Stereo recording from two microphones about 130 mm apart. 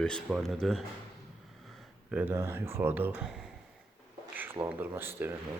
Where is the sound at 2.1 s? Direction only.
15° right (ahead or behind).